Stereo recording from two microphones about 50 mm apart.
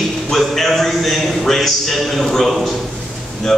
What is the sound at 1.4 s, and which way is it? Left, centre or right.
A man's voice, centre.